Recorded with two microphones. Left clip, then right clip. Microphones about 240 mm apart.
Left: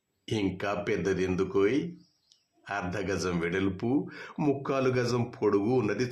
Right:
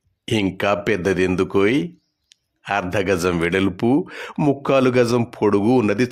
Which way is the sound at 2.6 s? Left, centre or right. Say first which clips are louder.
Right 12 dB; right.